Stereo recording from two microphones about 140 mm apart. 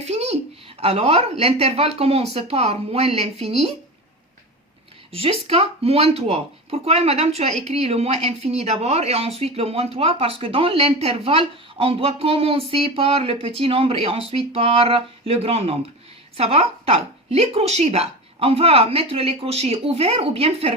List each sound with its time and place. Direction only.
0.0 s a sound: 50° right (ahead or behind)
0.8 s speech: 45° right (ahead or behind)
5.1 s speech: 45° right (ahead or behind)